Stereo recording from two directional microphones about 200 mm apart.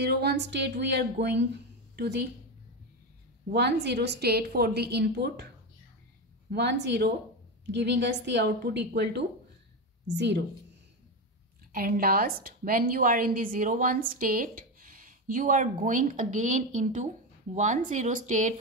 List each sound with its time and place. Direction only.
0.0 s a woman's voice: 55° right (ahead or behind)
3.5 s a woman's voice: 55° right (ahead or behind)
6.5 s a woman's voice: 60° right (ahead or behind)
11.7 s a woman's voice: 50° right (ahead or behind)